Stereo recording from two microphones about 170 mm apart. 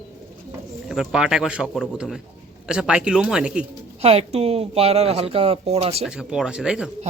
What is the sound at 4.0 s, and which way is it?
Speech, 35° right (ahead or behind).